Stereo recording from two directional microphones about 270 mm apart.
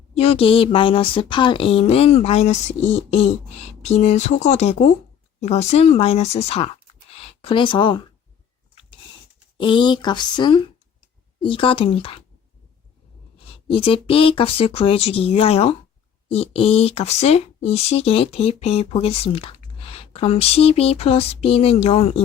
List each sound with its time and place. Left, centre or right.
0.1 s speech: left
8.7 s a sound: centre
9.6 s speech: centre
13.7 s speech: centre